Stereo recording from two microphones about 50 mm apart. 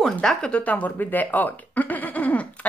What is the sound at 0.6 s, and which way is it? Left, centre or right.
Speech, left.